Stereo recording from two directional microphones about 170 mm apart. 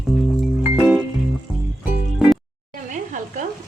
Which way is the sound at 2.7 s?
45° right (ahead or behind).